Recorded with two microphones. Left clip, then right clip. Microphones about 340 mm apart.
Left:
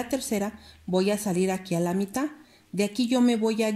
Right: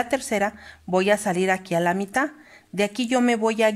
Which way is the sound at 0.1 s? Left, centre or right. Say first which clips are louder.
Right 6 dB; right.